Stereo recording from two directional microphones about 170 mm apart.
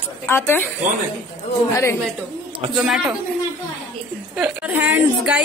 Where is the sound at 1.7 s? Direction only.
15° left (ahead or behind).